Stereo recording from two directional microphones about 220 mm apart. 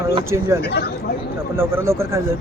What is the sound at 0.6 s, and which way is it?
Speech, 45° left (ahead or behind).